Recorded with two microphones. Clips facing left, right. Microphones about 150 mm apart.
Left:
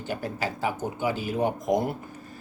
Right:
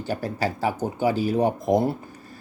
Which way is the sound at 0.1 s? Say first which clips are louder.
Right 4 dB; 35° right (ahead or behind).